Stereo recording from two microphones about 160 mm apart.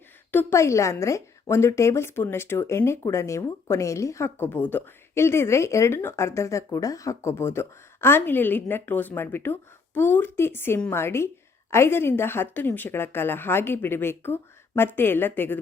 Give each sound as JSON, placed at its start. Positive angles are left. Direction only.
{"t": 0.3, "sound": "a woman's voice", "side_deg": 15}